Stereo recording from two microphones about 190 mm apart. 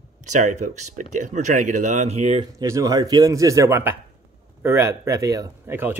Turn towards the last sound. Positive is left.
turn(degrees=-10)  # may be behind; listen again after turning